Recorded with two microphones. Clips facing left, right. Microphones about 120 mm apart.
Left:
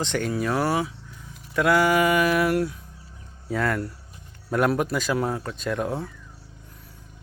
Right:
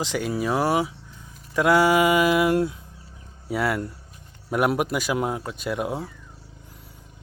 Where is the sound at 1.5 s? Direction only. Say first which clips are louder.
Right 2 dB; 20° right (ahead or behind).